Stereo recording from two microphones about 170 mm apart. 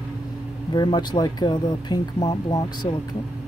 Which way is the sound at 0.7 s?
25° left (ahead or behind).